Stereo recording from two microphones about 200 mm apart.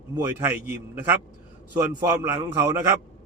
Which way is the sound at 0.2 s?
10° right (ahead or behind).